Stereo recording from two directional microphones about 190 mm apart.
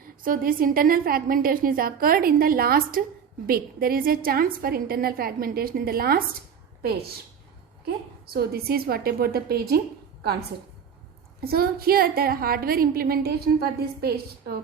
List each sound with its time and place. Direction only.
0.0 s a woman's voice: 50° right (ahead or behind)
8.3 s a woman's voice: 55° right (ahead or behind)
11.3 s a woman's voice: 55° right (ahead or behind)